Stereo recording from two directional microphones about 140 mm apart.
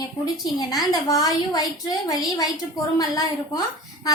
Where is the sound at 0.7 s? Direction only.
25° left (ahead or behind).